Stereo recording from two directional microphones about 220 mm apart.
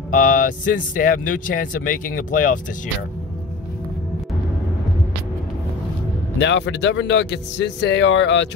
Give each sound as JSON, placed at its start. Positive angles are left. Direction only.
{"t": 0.1, "sound": "speech", "side_deg": 40}
{"t": 6.3, "sound": "speech", "side_deg": 55}